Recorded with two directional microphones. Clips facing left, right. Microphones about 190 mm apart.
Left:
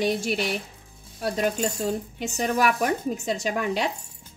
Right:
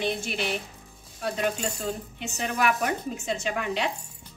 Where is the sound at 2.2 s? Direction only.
40° left (ahead or behind).